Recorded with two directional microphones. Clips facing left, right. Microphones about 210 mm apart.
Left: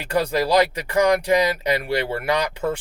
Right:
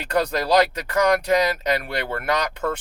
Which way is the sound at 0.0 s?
10° left (ahead or behind).